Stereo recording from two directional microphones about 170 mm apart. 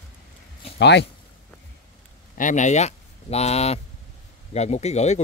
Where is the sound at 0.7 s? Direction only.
90° left.